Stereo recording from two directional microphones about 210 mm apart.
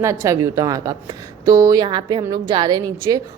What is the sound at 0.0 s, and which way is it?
A woman's voice, 15° right (ahead or behind).